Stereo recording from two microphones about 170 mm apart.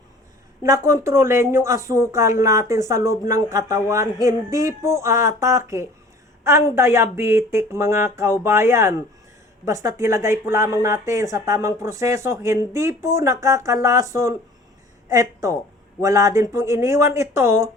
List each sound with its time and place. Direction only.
0.6 s a woman's voice: 15° right (ahead or behind)